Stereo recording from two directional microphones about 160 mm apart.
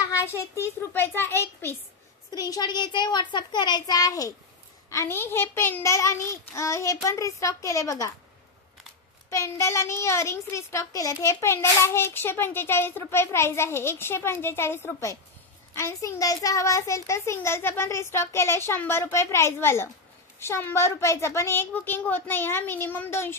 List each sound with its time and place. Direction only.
0.0 s a child's voice: 15° left (ahead or behind)
9.3 s a child's voice: 20° left (ahead or behind)